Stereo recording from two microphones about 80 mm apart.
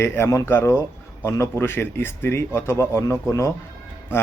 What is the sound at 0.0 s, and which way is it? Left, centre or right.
Speech, left.